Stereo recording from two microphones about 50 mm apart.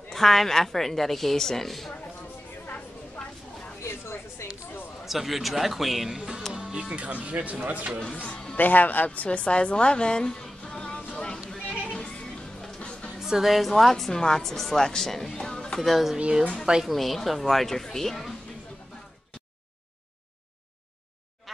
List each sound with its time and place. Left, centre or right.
0.1 s a woman's voice: centre
3.2 s a sound: centre
3.8 s a sound: left
5.0 s a woman's voice: centre
6.5 s speech: centre
8.5 s a woman's voice: left; by 11.1 s centre
11.1 s a sound: centre
11.6 s music: centre
11.9 s music: centre
13.2 s a woman's voice: centre
15.8 s a woman's voice: centre